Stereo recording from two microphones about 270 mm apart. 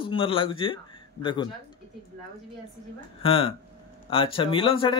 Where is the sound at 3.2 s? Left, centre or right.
Left.